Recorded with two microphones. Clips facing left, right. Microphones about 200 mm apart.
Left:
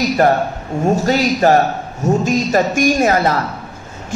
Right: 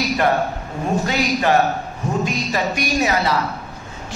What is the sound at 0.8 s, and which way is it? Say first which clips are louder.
A man's voice: left 6 dB; 40° left (ahead or behind).